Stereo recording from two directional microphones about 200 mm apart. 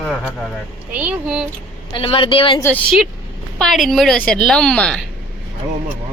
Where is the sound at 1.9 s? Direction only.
25° left (ahead or behind).